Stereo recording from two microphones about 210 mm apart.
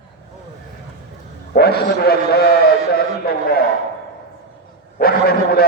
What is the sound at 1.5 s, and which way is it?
Speech, 50° left (ahead or behind).